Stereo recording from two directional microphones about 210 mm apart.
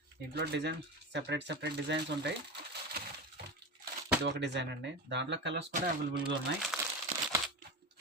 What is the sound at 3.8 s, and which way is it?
Speech, 55° right (ahead or behind).